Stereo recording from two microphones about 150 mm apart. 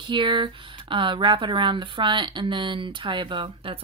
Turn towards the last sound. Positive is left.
turn(degrees=-35)  # may be behind; listen again after turning